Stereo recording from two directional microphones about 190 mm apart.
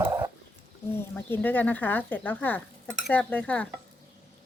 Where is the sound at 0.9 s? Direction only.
10° left (ahead or behind).